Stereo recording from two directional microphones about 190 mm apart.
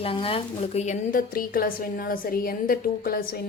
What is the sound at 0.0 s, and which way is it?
Speech, 30° left (ahead or behind).